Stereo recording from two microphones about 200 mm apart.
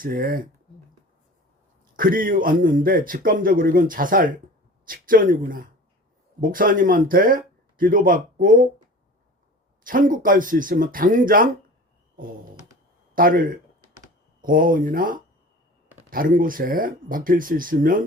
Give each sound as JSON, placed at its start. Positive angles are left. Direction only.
{"t": 0.0, "sound": "a man's voice", "side_deg": -45}
{"t": 2.0, "sound": "a man's voice", "side_deg": -45}
{"t": 9.8, "sound": "a man's voice", "side_deg": -45}
{"t": 13.1, "sound": "a man's voice", "side_deg": -45}